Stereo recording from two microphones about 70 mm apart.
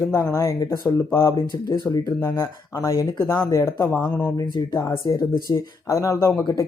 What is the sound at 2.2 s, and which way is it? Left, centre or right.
Speech, left.